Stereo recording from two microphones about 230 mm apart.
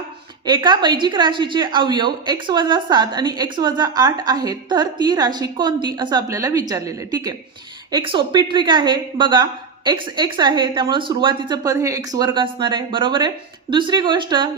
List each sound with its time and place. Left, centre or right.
0.4 s a woman's voice: centre